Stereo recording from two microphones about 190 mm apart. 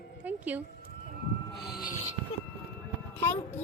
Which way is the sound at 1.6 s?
55° left (ahead or behind).